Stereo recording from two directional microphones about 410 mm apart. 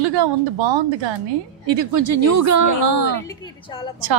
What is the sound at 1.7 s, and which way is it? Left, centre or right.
A woman's voice, right.